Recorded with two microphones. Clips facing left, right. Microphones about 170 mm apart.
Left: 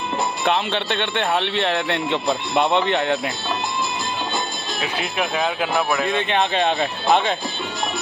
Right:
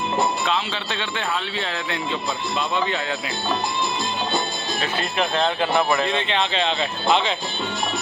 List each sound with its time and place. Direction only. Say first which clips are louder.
0.4 s speech: left 4 dB; 60° left (ahead or behind)
4.8 s speech: even; 10° left (ahead or behind)
6.3 s speech: left 3 dB; 50° left (ahead or behind)